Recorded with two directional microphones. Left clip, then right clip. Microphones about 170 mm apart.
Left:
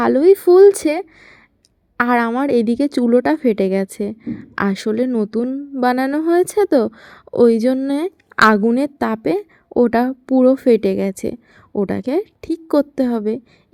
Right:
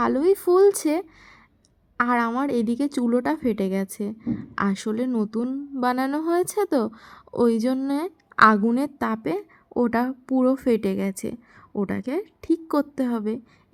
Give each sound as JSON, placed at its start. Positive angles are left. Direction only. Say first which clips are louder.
{"t": 0.0, "sound": "a woman's voice", "louder": "left 8 dB", "side_deg": 20}